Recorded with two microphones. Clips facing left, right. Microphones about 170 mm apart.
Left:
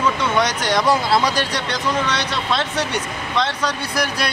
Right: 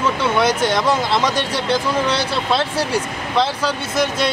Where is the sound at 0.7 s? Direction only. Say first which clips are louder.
Left 1 dB; centre (ahead or behind).